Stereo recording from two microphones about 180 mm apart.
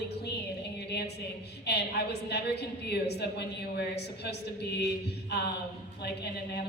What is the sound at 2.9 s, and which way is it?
A woman's voice, 65° left (ahead or behind).